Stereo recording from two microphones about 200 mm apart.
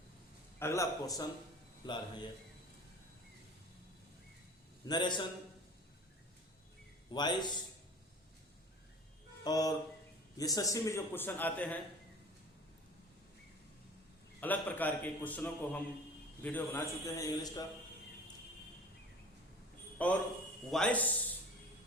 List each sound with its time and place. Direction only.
0.6 s a man's voice: 15° left (ahead or behind)
4.9 s a man's voice: 20° left (ahead or behind)
7.1 s a man's voice: 20° left (ahead or behind)
9.4 s a man's voice: 20° left (ahead or behind)
14.4 s a man's voice: 10° left (ahead or behind)
20.0 s a man's voice: 10° left (ahead or behind)